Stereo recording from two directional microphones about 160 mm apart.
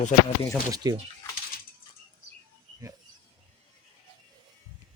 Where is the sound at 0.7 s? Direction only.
25° right (ahead or behind).